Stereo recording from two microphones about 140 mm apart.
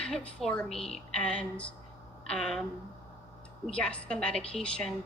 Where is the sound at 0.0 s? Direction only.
5° left (ahead or behind).